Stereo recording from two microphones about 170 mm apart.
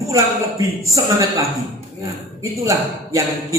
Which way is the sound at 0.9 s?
20° right (ahead or behind).